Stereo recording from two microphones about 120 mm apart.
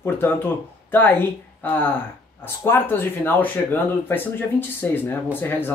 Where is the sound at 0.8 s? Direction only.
15° left (ahead or behind).